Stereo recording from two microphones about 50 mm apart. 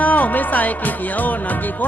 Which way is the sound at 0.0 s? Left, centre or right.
Left.